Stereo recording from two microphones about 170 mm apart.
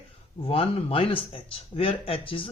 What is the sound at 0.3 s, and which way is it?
Speech, 35° left (ahead or behind).